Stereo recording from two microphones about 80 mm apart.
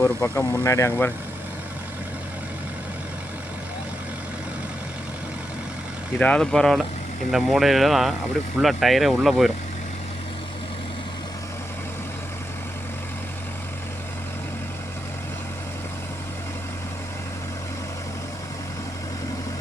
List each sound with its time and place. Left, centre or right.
0.0 s speech: left
6.1 s speech: centre
7.3 s speech: centre